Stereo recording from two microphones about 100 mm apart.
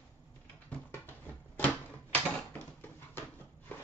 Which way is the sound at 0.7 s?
20° left (ahead or behind).